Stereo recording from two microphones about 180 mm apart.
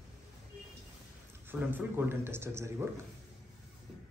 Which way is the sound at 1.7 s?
10° right (ahead or behind).